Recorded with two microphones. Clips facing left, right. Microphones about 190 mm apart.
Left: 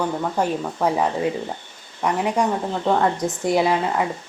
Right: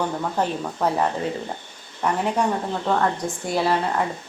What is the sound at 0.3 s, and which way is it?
Speech, 10° left (ahead or behind).